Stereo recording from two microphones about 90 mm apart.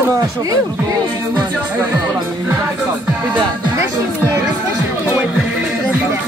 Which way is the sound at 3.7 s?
35° right (ahead or behind).